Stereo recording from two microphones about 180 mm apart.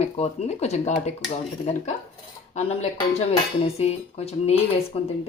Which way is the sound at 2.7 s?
35° left (ahead or behind).